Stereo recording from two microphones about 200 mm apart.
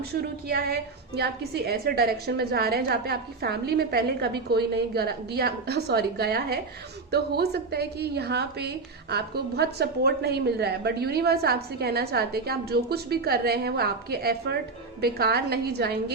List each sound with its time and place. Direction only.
0.1 s a woman's voice: 50° right (ahead or behind)